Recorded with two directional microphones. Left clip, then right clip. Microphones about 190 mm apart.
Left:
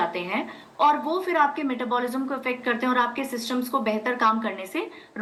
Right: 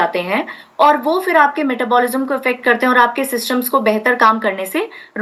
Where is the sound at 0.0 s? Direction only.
55° right (ahead or behind).